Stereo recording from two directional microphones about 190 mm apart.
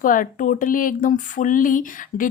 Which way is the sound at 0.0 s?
45° left (ahead or behind).